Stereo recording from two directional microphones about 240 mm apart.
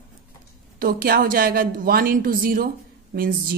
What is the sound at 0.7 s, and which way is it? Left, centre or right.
A woman's voice, right.